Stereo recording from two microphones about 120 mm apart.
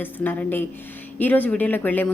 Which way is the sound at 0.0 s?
15° left (ahead or behind).